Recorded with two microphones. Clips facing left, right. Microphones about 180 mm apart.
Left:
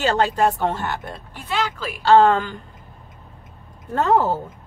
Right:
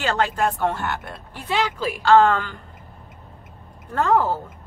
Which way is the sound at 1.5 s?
20° right (ahead or behind).